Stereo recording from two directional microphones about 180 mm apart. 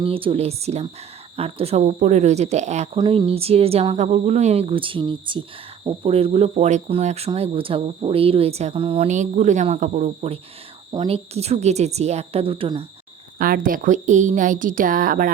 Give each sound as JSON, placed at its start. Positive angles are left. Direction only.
{"t": 0.0, "sound": "speech", "side_deg": -30}
{"t": 9.0, "sound": "speech", "side_deg": -40}
{"t": 13.4, "sound": "a woman's voice", "side_deg": -50}